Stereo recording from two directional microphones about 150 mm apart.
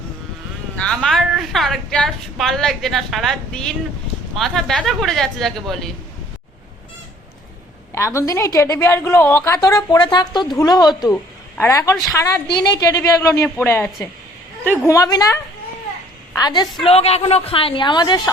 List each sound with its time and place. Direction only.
0.8 s a woman's voice: 5° left (ahead or behind)
7.9 s a woman's voice: 20° left (ahead or behind)
11.1 s a woman's voice: 15° left (ahead or behind)
16.4 s a woman's voice: 30° left (ahead or behind)
16.8 s a woman's voice: 40° left (ahead or behind)